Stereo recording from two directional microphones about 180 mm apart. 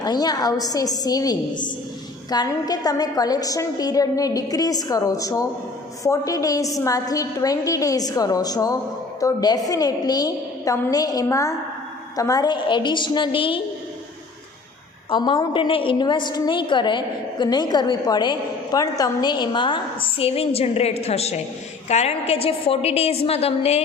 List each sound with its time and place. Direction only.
0.0 s a woman's voice: 25° left (ahead or behind)
15.1 s a woman's voice: 25° left (ahead or behind)